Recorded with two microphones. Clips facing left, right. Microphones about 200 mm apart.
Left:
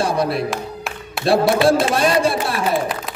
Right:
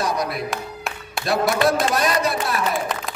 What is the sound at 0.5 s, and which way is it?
Music, centre (ahead or behind).